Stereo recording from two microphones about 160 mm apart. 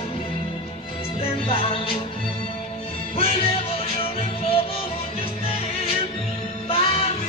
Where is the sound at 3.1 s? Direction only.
35° left (ahead or behind).